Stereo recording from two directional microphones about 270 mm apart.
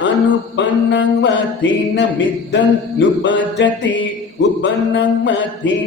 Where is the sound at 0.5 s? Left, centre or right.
Left.